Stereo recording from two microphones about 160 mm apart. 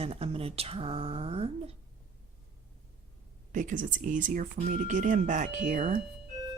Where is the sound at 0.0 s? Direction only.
40° right (ahead or behind).